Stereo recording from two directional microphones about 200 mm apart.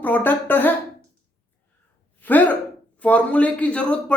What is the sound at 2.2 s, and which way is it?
Speech, 10° left (ahead or behind).